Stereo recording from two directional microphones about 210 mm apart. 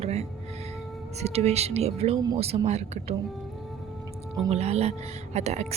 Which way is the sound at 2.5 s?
30° right (ahead or behind).